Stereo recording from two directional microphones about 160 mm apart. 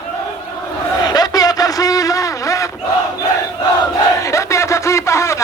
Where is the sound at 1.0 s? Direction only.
25° left (ahead or behind).